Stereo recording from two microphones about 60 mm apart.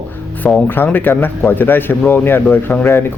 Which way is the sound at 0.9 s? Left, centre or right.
Left.